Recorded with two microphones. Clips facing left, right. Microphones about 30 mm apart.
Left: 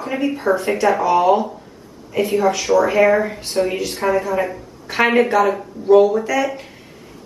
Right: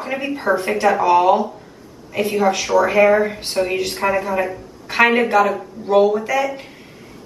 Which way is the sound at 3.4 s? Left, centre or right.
Right.